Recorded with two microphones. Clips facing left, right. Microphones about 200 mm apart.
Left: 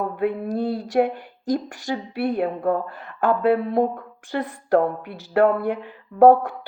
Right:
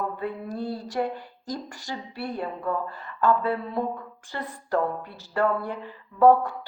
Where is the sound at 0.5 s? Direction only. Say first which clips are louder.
Left 8 dB; 65° left (ahead or behind).